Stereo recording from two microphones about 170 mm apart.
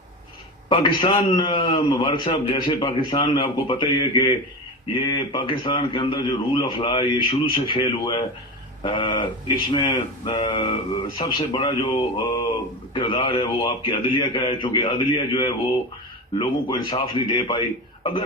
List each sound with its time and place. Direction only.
0.7 s a man's voice: 30° left (ahead or behind)